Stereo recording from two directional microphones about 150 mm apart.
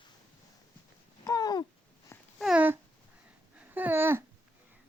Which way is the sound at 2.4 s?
10° right (ahead or behind).